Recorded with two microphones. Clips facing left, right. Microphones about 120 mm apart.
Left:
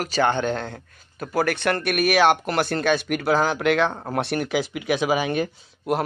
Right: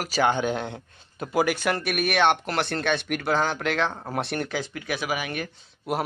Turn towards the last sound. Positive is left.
turn(degrees=0)  # may be behind; listen again after turning